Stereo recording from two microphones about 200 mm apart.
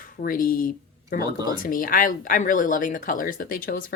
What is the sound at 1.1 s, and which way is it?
Speech, 20° right (ahead or behind).